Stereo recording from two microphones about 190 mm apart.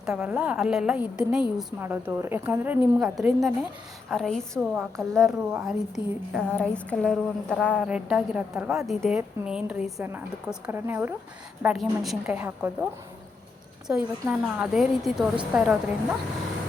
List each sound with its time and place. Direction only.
0.0 s a woman's voice: 5° right (ahead or behind)
6.0 s a sound: 25° left (ahead or behind)
6.3 s a woman's voice: 5° left (ahead or behind)